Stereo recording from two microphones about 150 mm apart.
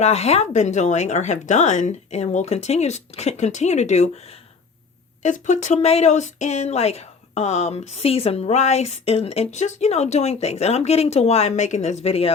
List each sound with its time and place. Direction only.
0.0 s speech: 45° left (ahead or behind)